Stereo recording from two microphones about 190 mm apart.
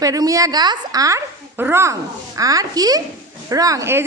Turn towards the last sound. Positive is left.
turn(degrees=-15)  # may be behind; listen again after turning